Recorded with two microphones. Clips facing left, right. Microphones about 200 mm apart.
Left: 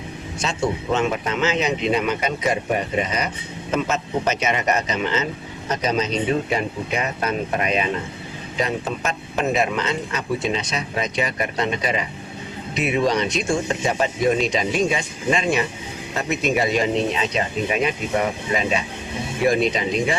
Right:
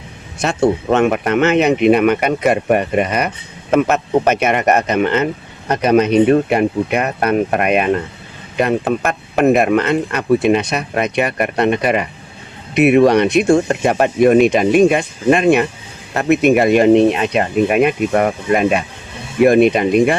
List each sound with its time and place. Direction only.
0.3 s speech: 60° right (ahead or behind)